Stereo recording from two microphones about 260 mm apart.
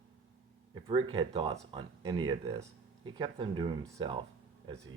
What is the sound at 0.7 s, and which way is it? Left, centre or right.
Speech, centre.